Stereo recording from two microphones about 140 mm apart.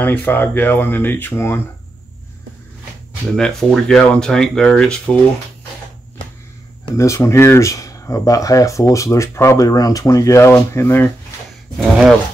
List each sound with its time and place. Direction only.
0.0 s speech: 15° left (ahead or behind)
3.3 s speech: 5° left (ahead or behind)
7.0 s speech: 20° left (ahead or behind)
11.8 s speech: centre (ahead or behind)